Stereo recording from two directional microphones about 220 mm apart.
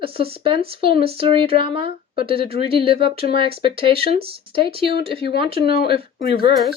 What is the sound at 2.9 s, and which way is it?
Speech, 45° left (ahead or behind).